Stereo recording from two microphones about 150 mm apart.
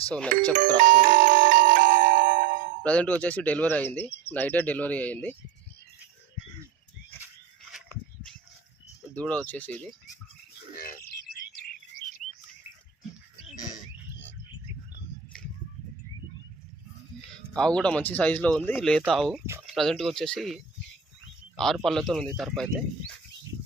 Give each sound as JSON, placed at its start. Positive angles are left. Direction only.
{"t": 0.1, "sound": "speech", "side_deg": 5}
{"t": 0.8, "sound": "music", "side_deg": -65}
{"t": 2.8, "sound": "speech", "side_deg": 10}
{"t": 9.1, "sound": "speech", "side_deg": 5}
{"t": 17.5, "sound": "speech", "side_deg": 5}
{"t": 21.5, "sound": "a sound", "side_deg": 0}
{"t": 21.8, "sound": "speech", "side_deg": 0}